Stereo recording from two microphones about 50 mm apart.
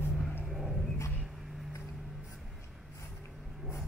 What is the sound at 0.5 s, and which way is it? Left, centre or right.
Roaring cats, centre.